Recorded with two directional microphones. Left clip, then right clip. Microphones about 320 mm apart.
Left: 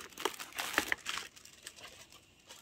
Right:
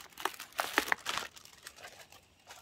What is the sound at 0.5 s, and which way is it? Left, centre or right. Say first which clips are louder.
Crumpling: right 4 dB; centre.